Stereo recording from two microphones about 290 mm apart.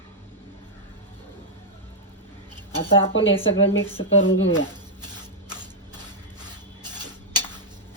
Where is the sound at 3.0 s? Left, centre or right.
Left.